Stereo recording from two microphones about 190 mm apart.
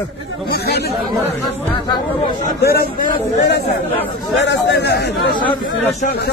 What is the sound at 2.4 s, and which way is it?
Speech, 55° left (ahead or behind).